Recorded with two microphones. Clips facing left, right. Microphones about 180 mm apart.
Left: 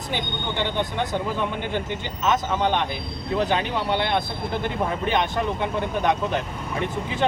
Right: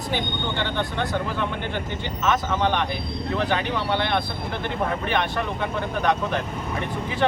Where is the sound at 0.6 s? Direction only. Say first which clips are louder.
Left 3 dB; 15° left (ahead or behind).